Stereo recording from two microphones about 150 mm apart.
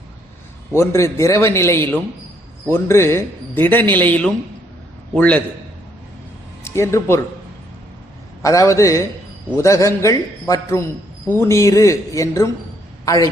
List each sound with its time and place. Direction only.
0.7 s a man's voice: 20° left (ahead or behind)
6.7 s a man's voice: 20° left (ahead or behind)
8.4 s a man's voice: 20° left (ahead or behind)